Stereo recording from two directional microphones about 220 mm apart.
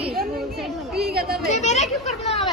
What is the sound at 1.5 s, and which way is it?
Speech, 30° left (ahead or behind).